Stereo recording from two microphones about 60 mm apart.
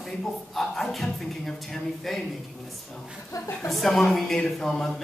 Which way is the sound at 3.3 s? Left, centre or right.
Left.